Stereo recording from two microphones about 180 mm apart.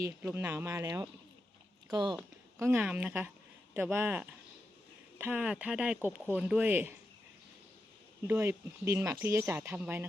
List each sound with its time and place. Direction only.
0.0 s speech: 10° right (ahead or behind)
2.6 s speech: 10° right (ahead or behind)
8.3 s speech: 15° right (ahead or behind)